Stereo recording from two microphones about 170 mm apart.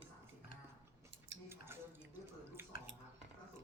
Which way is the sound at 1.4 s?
15° right (ahead or behind).